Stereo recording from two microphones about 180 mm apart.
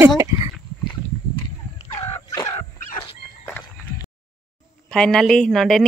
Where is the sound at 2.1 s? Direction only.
15° left (ahead or behind).